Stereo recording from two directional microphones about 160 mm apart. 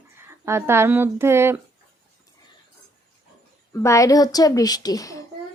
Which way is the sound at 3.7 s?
20° left (ahead or behind).